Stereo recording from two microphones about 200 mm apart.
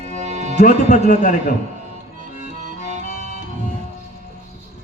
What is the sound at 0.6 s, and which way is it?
Speech, 35° left (ahead or behind).